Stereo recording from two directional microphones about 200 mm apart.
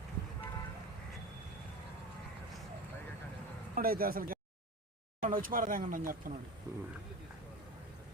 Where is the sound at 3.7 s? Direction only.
45° right (ahead or behind).